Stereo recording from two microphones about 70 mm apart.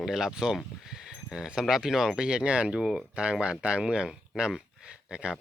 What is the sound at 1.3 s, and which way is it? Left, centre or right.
Speech, centre.